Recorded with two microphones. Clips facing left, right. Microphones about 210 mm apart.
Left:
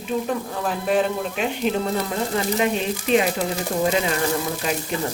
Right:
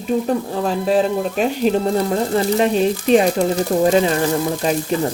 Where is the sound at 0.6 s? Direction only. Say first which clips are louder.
Right 4 dB; 30° right (ahead or behind).